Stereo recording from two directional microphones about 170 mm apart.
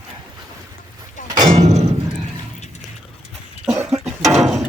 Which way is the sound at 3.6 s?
5° right (ahead or behind).